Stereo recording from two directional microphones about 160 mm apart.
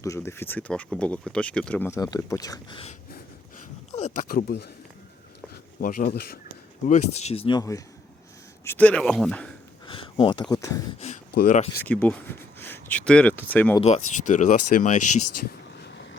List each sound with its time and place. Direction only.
0.0 s speech: 15° left (ahead or behind)
2.0 s speech: 20° left (ahead or behind)
3.9 s speech: 50° left (ahead or behind); by 4.7 s 90° left
5.8 s speech: 60° left (ahead or behind)
6.8 s speech: 45° left (ahead or behind); by 7.8 s 25° left (ahead or behind)
8.6 s speech: 10° left (ahead or behind)
9.8 s a sound: 30° left (ahead or behind)
10.5 s speech: 20° left (ahead or behind)
11.0 s speech: 45° left (ahead or behind)
11.8 s speech: 10° left (ahead or behind)
13.8 s speech: 45° left (ahead or behind)